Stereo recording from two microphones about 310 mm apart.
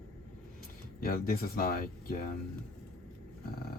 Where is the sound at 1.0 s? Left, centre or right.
Left.